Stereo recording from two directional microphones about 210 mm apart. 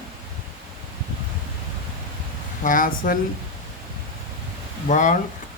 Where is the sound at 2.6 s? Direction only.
40° left (ahead or behind).